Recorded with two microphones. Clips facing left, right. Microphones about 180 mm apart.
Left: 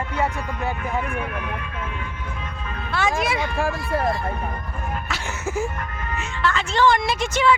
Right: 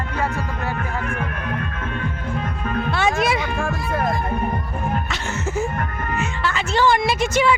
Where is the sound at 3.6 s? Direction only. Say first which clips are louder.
Even; 30° left (ahead or behind).